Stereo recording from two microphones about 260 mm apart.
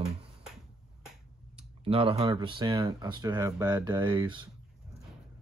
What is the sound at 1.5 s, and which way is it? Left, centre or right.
Speech, right.